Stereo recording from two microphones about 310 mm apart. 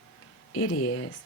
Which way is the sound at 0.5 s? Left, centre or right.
Left.